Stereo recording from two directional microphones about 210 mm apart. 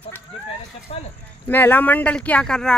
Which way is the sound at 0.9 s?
30° left (ahead or behind).